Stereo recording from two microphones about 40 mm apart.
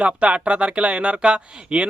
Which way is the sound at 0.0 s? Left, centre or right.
Right.